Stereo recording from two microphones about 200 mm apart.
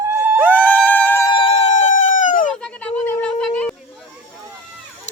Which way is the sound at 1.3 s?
25° left (ahead or behind).